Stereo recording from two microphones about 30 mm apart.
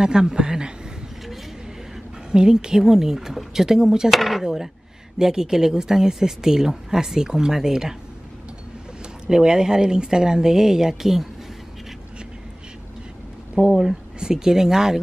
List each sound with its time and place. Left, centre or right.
0.0 s speech: right
2.3 s speech: right
4.1 s speech: centre
4.4 s speech: centre
9.3 s speech: right
13.7 s speech: centre